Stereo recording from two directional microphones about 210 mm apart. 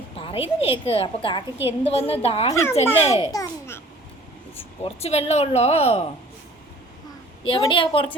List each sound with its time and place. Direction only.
0.2 s a woman's voice: 25° left (ahead or behind)
2.5 s a child's voice: 15° left (ahead or behind)
3.0 s a woman's voice: 30° left (ahead or behind)
3.3 s babbling: 15° left (ahead or behind)
4.8 s a woman's voice: 30° left (ahead or behind)
7.4 s a woman's voice: 25° left (ahead or behind)